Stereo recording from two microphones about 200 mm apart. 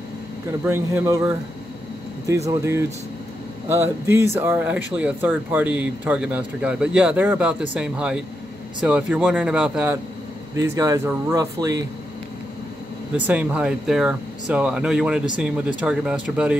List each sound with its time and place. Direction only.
0.7 s speech: 10° right (ahead or behind)
2.5 s speech: 15° right (ahead or behind)
10.5 s speech: 15° right (ahead or behind)
13.1 s speech: 10° right (ahead or behind)